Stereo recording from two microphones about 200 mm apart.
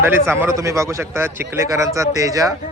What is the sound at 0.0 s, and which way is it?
A man's voice, 10° right (ahead or behind).